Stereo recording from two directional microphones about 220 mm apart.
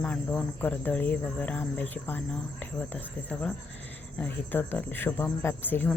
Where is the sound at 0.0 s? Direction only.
5° left (ahead or behind).